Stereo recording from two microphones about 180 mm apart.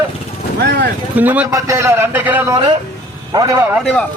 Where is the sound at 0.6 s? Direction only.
65° right (ahead or behind).